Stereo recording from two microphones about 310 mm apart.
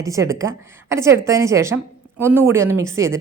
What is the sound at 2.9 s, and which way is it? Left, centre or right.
Speech, right.